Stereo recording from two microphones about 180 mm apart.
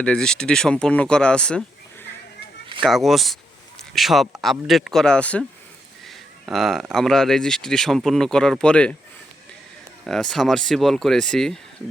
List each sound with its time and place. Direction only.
0.0 s speech: 5° left (ahead or behind)
2.8 s speech: centre (ahead or behind)
6.1 s a sound: centre (ahead or behind)
6.9 s speech: centre (ahead or behind)
10.1 s speech: 5° left (ahead or behind)